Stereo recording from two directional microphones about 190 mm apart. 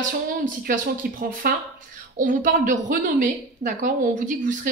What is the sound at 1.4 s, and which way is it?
A woman's voice, 50° right (ahead or behind).